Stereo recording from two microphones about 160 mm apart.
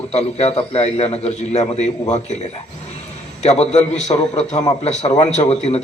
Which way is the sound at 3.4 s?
45° left (ahead or behind).